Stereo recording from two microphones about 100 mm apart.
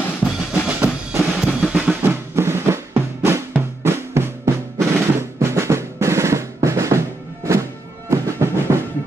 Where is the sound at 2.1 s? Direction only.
25° right (ahead or behind).